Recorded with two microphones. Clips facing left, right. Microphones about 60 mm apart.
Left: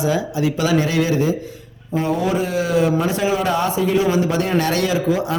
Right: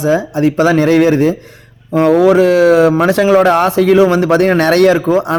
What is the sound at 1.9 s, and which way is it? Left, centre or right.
Speech, right.